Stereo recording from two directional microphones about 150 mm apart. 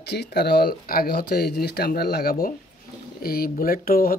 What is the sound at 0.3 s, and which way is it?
Speech, 90° left.